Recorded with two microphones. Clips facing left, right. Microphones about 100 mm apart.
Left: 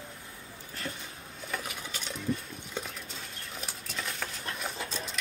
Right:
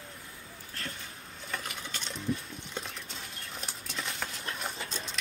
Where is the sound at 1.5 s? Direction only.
5° left (ahead or behind).